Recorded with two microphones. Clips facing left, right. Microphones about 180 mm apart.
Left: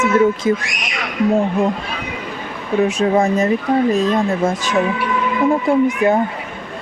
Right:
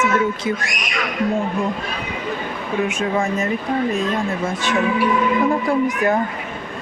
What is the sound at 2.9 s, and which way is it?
Speech, 40° left (ahead or behind).